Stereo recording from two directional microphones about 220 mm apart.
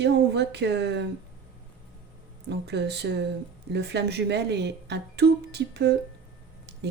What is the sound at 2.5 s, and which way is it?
A woman's voice, 50° right (ahead or behind).